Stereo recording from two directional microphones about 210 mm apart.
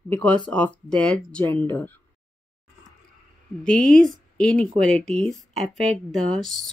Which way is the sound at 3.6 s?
5° left (ahead or behind).